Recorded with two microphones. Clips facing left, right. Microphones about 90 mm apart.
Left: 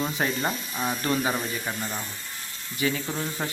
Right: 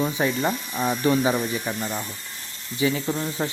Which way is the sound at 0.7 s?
50° right (ahead or behind).